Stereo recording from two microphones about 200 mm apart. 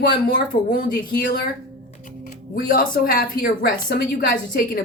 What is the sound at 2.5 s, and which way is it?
A woman's voice, 45° left (ahead or behind).